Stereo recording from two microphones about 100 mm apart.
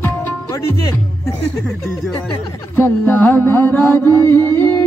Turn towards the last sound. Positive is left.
turn(degrees=20)  # may be behind; listen again after turning